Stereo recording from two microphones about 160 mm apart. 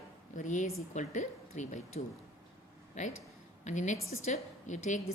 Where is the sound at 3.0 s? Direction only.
50° left (ahead or behind).